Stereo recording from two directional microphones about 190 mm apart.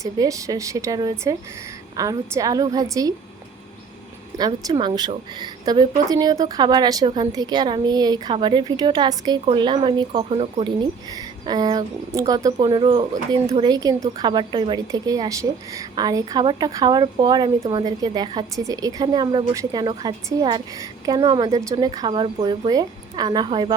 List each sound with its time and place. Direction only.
0.0 s speech: 15° right (ahead or behind)
4.4 s a woman's voice: 20° right (ahead or behind)